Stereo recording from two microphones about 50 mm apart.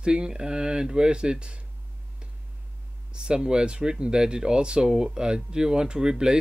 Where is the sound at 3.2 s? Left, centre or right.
Centre.